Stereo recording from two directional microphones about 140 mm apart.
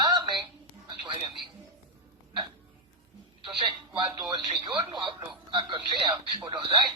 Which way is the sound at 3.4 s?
30° right (ahead or behind).